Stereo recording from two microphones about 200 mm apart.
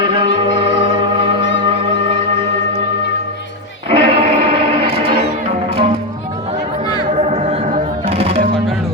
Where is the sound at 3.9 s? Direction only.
25° right (ahead or behind).